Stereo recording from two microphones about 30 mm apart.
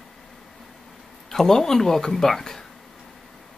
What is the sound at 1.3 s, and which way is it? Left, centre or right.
Speech, centre.